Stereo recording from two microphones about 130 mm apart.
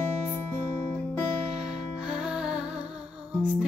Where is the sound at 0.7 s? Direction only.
20° left (ahead or behind).